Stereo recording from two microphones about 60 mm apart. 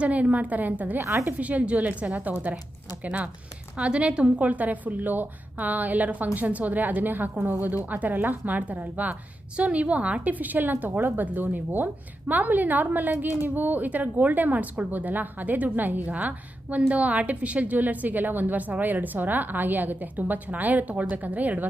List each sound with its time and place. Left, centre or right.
0.0 s a woman's voice: right